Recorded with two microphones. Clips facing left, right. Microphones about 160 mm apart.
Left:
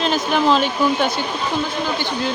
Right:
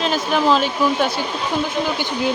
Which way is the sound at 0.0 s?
Centre (ahead or behind).